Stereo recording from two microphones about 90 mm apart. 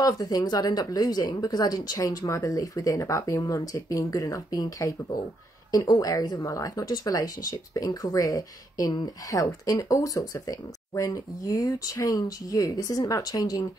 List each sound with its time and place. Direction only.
0.0 s speech: 45° left (ahead or behind)